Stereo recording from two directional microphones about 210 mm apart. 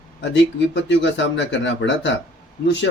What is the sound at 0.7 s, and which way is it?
Speech, 60° left (ahead or behind).